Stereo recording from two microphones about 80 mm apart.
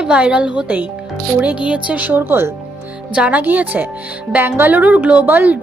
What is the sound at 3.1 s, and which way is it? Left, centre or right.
A woman's voice, centre.